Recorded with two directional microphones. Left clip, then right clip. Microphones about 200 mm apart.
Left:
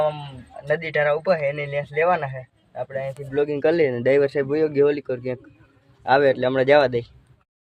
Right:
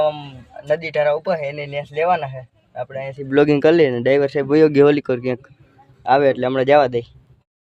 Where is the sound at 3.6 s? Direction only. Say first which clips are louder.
Right 5 dB; 20° right (ahead or behind).